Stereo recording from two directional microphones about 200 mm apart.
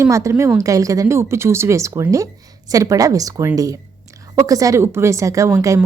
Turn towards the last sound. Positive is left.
turn(degrees=-15)  # may be behind; listen again after turning